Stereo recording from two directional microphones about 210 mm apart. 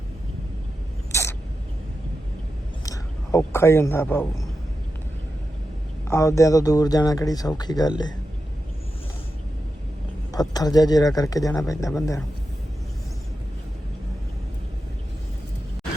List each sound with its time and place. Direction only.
1.1 s a sound: 10° left (ahead or behind)
2.8 s a man's voice: 15° left (ahead or behind)
6.1 s speech: 15° left (ahead or behind)
10.3 s speech: 15° left (ahead or behind)